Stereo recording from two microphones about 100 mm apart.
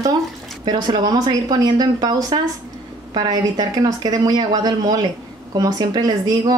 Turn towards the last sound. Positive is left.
turn(degrees=-40)  # may be behind; listen again after turning